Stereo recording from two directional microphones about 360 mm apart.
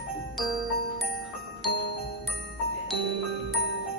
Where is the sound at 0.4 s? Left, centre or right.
Centre.